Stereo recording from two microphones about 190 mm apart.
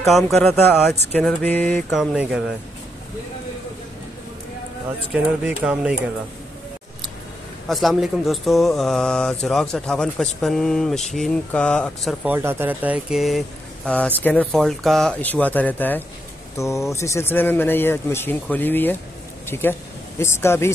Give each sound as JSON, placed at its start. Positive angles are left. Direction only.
{"t": 0.0, "sound": "speech", "side_deg": 0}
{"t": 5.1, "sound": "speech", "side_deg": -5}
{"t": 7.6, "sound": "speech", "side_deg": 0}
{"t": 12.3, "sound": "speech", "side_deg": -10}